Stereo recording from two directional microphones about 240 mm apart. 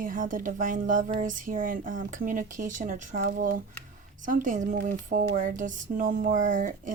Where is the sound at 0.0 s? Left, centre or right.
Right.